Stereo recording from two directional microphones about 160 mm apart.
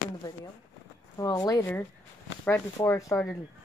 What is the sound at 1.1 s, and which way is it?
Speech, 25° left (ahead or behind).